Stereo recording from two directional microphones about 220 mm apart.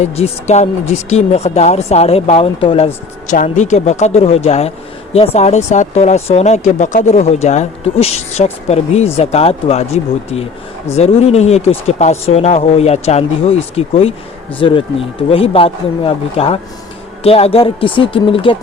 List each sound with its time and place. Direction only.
0.0 s speech: 30° left (ahead or behind)